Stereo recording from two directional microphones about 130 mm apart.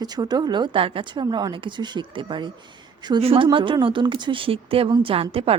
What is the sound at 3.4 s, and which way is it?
A woman's voice, 35° right (ahead or behind).